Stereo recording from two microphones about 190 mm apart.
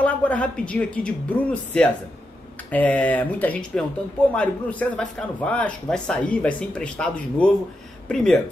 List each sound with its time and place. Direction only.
0.0 s speech: 5° left (ahead or behind)